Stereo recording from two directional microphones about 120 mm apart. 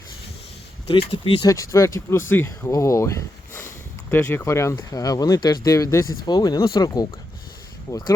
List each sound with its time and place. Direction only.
0.9 s speech: 50° left (ahead or behind)
1.4 s speech: 30° left (ahead or behind)